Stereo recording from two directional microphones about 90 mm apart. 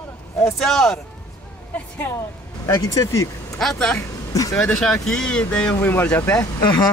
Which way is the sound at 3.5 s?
5° left (ahead or behind).